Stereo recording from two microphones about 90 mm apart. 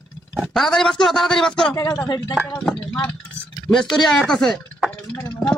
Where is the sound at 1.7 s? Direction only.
35° left (ahead or behind).